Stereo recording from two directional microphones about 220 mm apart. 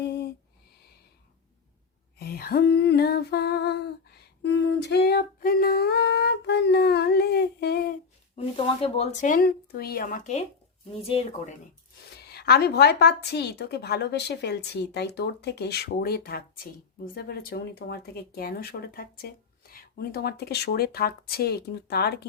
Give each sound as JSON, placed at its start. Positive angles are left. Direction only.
{"t": 0.0, "sound": "a sound", "side_deg": 50}
{"t": 2.1, "sound": "female singing", "side_deg": 45}
{"t": 8.4, "sound": "speech", "side_deg": 25}
{"t": 12.3, "sound": "speech", "side_deg": 45}